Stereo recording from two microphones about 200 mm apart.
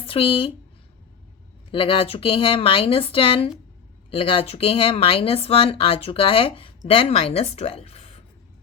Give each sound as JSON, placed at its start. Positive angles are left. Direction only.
{"t": 0.0, "sound": "speech", "side_deg": 25}
{"t": 1.7, "sound": "speech", "side_deg": 25}